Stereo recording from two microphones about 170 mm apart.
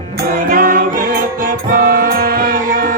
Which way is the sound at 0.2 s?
55° right (ahead or behind).